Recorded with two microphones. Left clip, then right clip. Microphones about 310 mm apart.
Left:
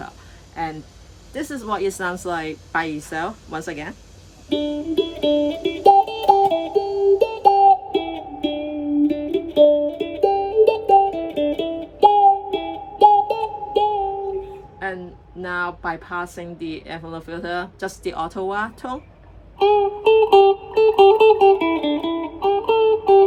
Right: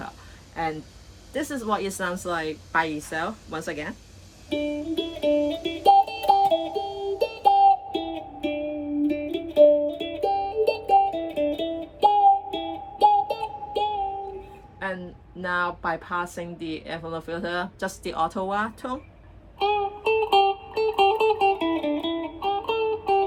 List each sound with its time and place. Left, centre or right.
0.5 s speech: centre
4.4 s music: left
14.8 s a sound: centre
15.4 s speech: centre
19.5 s music: left